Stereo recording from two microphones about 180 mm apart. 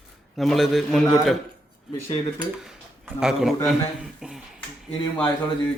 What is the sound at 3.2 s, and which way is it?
Speech, centre (ahead or behind).